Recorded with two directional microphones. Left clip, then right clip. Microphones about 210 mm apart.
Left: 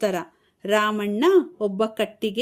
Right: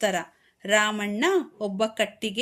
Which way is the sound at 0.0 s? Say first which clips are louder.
Left 1 dB; 45° left (ahead or behind).